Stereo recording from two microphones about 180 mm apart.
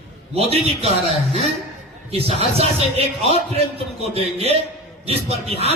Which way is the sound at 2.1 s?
35° right (ahead or behind).